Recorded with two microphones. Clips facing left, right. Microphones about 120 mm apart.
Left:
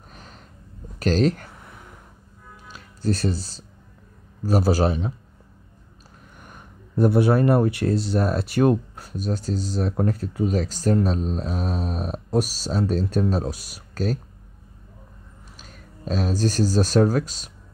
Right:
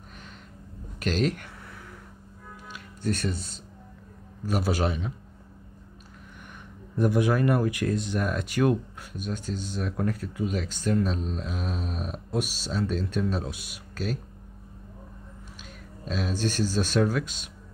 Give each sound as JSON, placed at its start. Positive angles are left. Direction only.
{"t": 0.9, "sound": "speech", "side_deg": 35}
{"t": 2.7, "sound": "speech", "side_deg": 30}
{"t": 6.5, "sound": "speech", "side_deg": 35}
{"t": 16.1, "sound": "speech", "side_deg": 40}